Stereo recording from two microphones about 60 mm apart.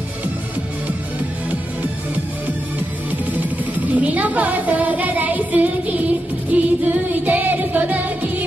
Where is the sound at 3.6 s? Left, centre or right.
Right.